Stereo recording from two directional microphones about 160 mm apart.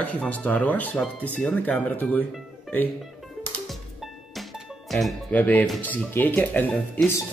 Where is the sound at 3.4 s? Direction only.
10° left (ahead or behind).